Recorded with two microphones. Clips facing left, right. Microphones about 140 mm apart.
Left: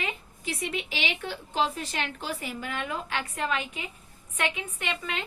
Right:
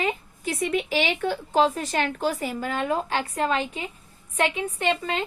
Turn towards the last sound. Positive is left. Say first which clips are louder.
# right 8 dB
turn(degrees=-35)  # may be behind; listen again after turning